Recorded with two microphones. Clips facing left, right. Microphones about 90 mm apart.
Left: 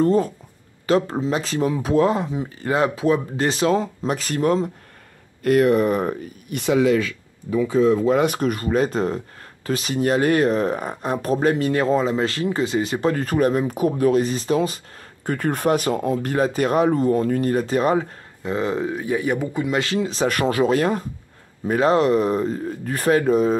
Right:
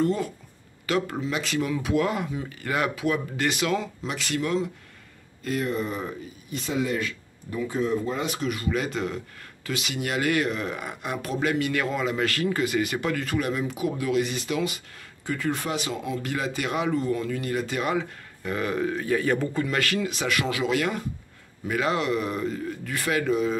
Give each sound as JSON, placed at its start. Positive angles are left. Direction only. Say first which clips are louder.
{"t": 0.0, "sound": "speech", "louder": "left 7 dB", "side_deg": 35}
{"t": 5.4, "sound": "speech", "louder": "left 11 dB", "side_deg": 60}
{"t": 8.0, "sound": "speech", "louder": "left 10 dB", "side_deg": 70}
{"t": 15.2, "sound": "speech", "louder": "left 7 dB", "side_deg": 50}
{"t": 18.4, "sound": "speech", "louder": "left 4 dB", "side_deg": 25}